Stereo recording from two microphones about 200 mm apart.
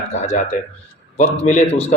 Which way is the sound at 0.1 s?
35° left (ahead or behind).